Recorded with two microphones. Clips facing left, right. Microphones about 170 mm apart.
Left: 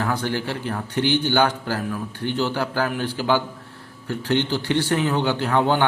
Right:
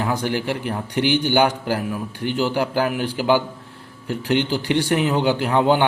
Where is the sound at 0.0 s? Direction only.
15° right (ahead or behind).